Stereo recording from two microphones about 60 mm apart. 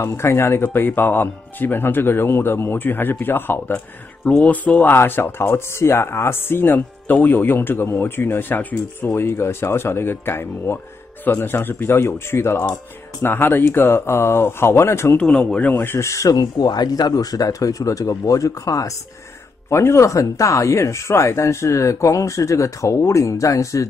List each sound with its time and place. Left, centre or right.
0.0 s speech: left
4.3 s speech: left
4.9 s speech: left
9.1 s speech: left
15.1 s speech: centre
15.7 s speech: left
16.1 s speech: left
19.7 s speech: left